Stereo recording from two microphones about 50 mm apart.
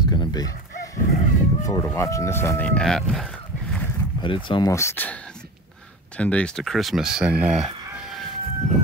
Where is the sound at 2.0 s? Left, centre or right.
Left.